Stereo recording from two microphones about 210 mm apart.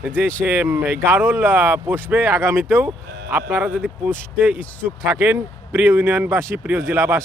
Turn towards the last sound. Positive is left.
turn(degrees=-15)  # may be behind; listen again after turning